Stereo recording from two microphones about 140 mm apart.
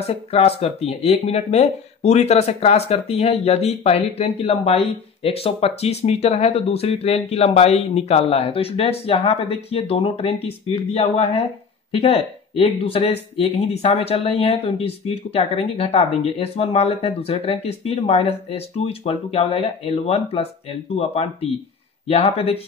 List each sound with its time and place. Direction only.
0.0 s speech: 45° left (ahead or behind)